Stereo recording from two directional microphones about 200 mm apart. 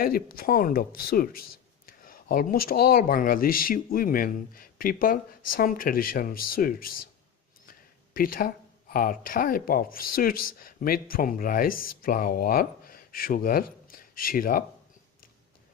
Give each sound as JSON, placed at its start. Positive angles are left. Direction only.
{"t": 0.0, "sound": "speech", "side_deg": 45}